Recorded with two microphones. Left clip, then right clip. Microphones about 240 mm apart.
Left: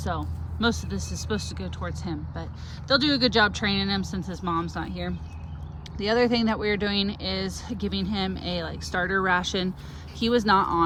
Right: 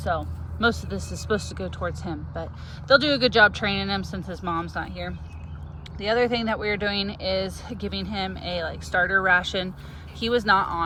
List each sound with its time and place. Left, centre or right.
0.0 s speech: centre